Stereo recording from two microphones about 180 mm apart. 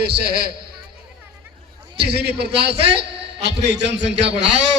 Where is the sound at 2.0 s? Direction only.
65° right (ahead or behind).